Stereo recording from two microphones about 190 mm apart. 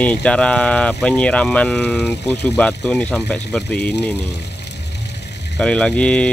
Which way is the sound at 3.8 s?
60° left (ahead or behind).